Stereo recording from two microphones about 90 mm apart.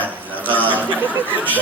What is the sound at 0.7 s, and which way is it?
Speech, 20° right (ahead or behind).